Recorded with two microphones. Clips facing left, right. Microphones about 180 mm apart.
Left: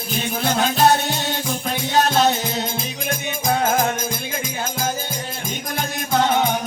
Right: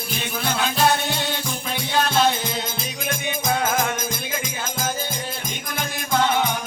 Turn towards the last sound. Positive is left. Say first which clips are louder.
# left 2 dB
turn(degrees=45)  # may be behind; listen again after turning